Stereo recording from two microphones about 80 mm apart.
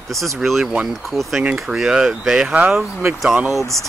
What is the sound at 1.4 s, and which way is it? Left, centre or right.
Speech, centre.